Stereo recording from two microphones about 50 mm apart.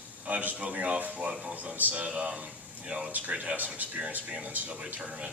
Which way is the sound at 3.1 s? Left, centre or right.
Right.